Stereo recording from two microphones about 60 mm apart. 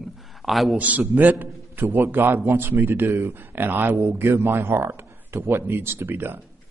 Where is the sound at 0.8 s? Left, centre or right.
Right.